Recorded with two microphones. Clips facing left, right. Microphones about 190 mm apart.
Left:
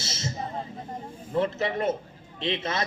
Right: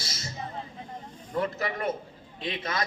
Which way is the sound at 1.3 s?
25° left (ahead or behind).